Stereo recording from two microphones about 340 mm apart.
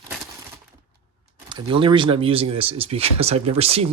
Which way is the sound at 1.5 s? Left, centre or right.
Centre.